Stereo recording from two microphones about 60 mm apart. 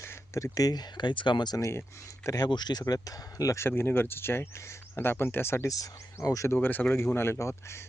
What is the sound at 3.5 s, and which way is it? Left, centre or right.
Speech, left.